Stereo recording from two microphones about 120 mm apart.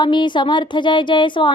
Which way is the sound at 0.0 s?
40° left (ahead or behind).